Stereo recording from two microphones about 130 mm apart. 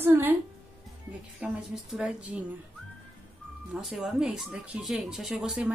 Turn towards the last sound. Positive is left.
turn(degrees=-5)  # may be behind; listen again after turning